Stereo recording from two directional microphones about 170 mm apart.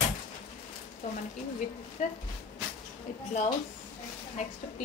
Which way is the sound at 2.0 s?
45° left (ahead or behind).